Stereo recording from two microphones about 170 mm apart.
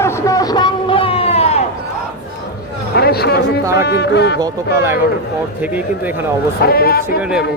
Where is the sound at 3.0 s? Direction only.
70° left (ahead or behind).